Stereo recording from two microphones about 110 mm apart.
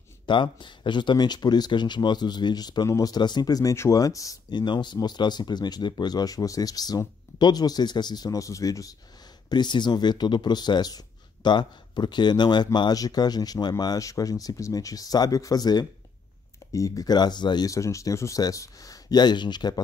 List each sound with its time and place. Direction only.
0.3 s speech: 45° left (ahead or behind); by 4.4 s 30° left (ahead or behind)
4.5 s speech: 40° left (ahead or behind)
9.5 s speech: 40° left (ahead or behind)
17.6 s speech: 30° left (ahead or behind)